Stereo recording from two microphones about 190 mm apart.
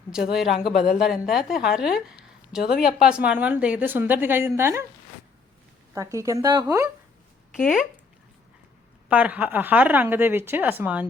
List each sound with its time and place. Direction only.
0.1 s a woman's voice: 5° right (ahead or behind)
2.6 s speech: 50° left (ahead or behind)
3.0 s speech: 5° right (ahead or behind)
5.9 s speech: 15° right (ahead or behind)
7.5 s a woman's voice: centre (ahead or behind)
9.0 s speech: 10° right (ahead or behind)